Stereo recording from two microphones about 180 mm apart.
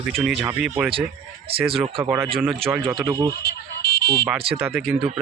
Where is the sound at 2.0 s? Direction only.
15° right (ahead or behind).